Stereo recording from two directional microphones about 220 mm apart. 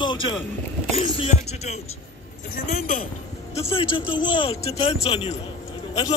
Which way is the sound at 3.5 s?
25° left (ahead or behind).